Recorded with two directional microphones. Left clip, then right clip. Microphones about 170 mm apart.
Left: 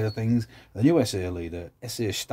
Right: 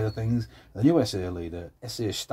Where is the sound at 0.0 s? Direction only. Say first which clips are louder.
Left 2 dB; 20° left (ahead or behind).